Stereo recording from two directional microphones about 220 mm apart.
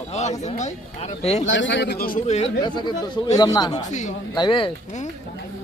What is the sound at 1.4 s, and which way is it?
Speech, 60° left (ahead or behind).